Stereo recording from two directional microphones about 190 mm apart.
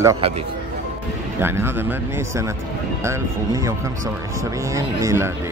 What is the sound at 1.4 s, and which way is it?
Speech, 10° right (ahead or behind).